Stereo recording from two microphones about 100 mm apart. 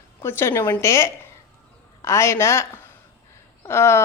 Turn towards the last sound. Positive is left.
turn(degrees=25)  # may be behind; listen again after turning